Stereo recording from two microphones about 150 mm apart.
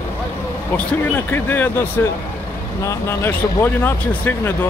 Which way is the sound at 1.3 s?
15° left (ahead or behind).